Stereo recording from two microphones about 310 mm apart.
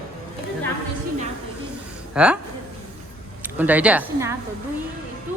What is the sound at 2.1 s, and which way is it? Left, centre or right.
Speech, centre.